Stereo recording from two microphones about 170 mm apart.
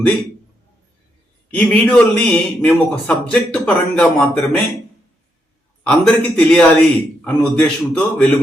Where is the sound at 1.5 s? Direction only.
10° left (ahead or behind).